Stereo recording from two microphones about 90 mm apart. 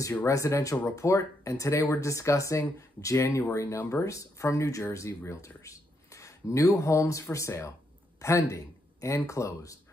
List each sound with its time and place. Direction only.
0.2 s speech: 35° left (ahead or behind)